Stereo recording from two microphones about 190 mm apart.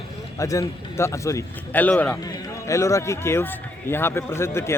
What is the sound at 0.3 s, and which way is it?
A man's voice, 15° left (ahead or behind).